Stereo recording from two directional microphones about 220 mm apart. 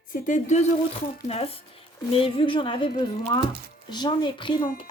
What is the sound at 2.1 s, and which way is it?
Speech, 25° left (ahead or behind).